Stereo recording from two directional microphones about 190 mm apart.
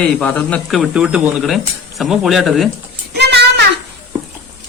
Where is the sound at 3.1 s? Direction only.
60° right (ahead or behind).